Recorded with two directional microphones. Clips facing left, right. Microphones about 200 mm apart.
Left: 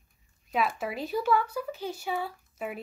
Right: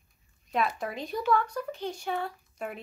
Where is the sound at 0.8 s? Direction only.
5° left (ahead or behind).